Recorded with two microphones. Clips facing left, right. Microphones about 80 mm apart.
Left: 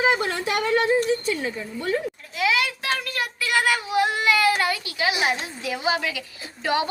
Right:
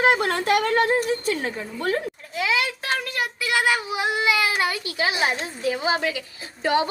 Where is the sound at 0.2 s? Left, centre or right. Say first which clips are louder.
Right 4 dB; right.